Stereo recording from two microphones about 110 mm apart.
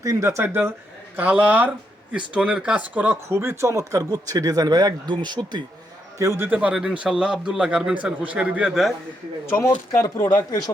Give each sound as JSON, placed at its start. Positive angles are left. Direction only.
{"t": 0.0, "sound": "a man's voice", "side_deg": -25}
{"t": 6.1, "sound": "speech", "side_deg": -25}
{"t": 6.6, "sound": "a man's voice", "side_deg": -10}
{"t": 9.5, "sound": "speech", "side_deg": 25}